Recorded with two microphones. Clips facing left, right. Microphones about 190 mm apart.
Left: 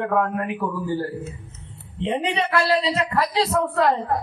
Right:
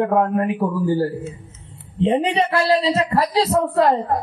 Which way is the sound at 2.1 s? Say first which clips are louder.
Right 3 dB; 35° right (ahead or behind).